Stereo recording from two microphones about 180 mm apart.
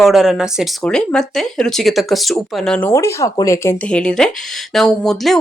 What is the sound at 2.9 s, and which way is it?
Speech, 15° left (ahead or behind).